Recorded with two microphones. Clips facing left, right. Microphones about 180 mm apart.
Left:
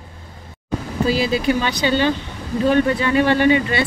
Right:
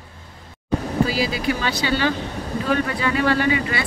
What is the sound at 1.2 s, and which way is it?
Speech, 25° left (ahead or behind).